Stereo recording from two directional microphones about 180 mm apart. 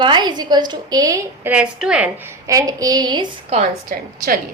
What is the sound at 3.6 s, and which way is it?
Speech, 50° right (ahead or behind).